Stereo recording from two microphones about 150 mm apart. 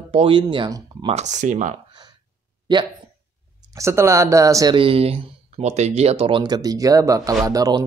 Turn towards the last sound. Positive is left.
turn(degrees=-25)  # may be behind; listen again after turning